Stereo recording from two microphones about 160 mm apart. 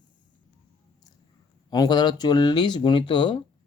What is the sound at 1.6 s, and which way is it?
Speech, 25° left (ahead or behind).